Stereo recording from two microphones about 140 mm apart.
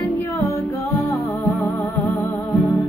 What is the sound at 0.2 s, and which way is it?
Music, 15° left (ahead or behind).